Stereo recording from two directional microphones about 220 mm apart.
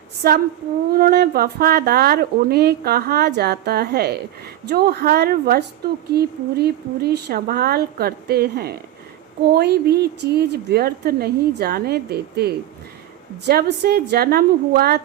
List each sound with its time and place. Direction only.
0.2 s speech: 45° right (ahead or behind)